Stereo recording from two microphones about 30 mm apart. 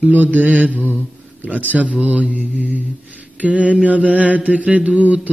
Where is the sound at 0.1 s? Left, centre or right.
Right.